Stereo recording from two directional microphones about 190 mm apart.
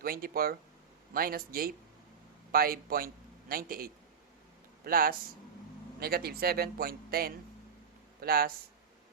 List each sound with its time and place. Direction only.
0.0 s a man's voice: 50° right (ahead or behind)